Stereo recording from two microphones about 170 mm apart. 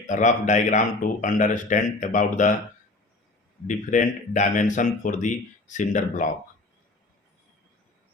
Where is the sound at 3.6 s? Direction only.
45° left (ahead or behind).